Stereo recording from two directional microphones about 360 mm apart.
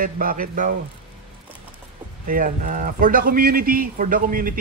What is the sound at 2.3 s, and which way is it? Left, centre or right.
A man's voice, right.